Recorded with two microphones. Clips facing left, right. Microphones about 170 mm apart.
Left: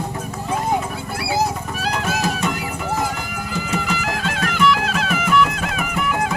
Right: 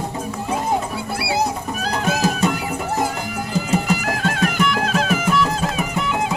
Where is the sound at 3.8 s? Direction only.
50° right (ahead or behind); by 6.1 s 35° right (ahead or behind).